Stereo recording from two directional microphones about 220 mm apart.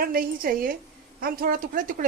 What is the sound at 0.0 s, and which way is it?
Speech, 40° right (ahead or behind).